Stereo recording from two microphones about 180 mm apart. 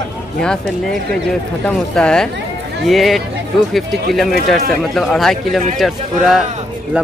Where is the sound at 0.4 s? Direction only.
5° left (ahead or behind).